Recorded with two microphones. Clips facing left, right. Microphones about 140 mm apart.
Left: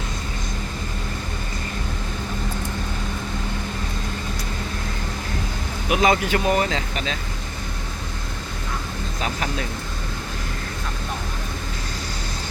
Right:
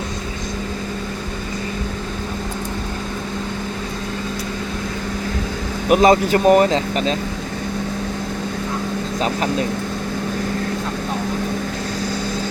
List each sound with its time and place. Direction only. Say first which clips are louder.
5.9 s speech: right 6 dB; 40° right (ahead or behind)